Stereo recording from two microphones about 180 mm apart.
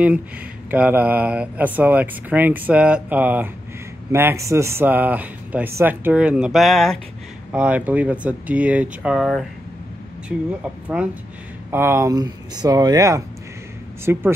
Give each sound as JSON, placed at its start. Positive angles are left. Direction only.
{"t": 0.7, "sound": "speech", "side_deg": -10}